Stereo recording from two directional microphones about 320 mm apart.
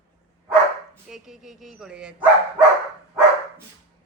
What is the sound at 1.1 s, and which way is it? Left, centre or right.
Bow-wow, centre.